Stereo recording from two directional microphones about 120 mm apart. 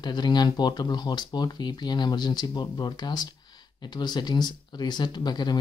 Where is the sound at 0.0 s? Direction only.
35° left (ahead or behind).